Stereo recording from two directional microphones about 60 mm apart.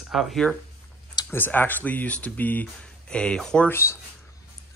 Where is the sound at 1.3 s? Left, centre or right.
Left.